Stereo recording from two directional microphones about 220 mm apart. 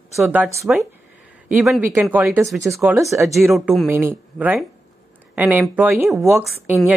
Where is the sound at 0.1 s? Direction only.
5° right (ahead or behind).